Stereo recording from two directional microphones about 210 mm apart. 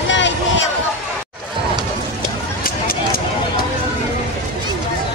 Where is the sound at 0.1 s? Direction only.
60° left (ahead or behind).